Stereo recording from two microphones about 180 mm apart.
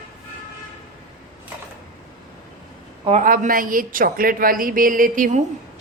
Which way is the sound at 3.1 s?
45° right (ahead or behind).